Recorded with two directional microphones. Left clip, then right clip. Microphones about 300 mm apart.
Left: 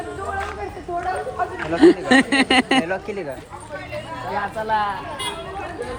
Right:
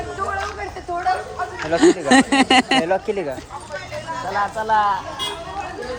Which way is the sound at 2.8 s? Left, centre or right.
Right.